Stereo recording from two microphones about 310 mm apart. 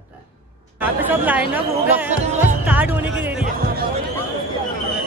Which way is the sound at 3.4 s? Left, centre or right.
Right.